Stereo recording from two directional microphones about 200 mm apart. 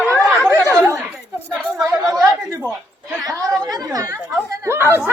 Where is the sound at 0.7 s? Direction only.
15° right (ahead or behind).